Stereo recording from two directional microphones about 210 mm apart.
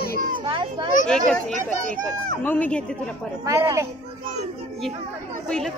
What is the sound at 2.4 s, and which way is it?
Speech, 10° left (ahead or behind).